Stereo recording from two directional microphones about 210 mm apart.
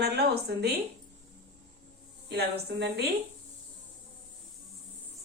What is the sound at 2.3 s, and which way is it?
Speech, 50° right (ahead or behind).